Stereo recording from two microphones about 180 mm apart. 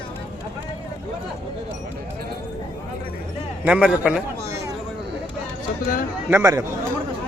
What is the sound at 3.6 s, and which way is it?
Speech, 5° right (ahead or behind).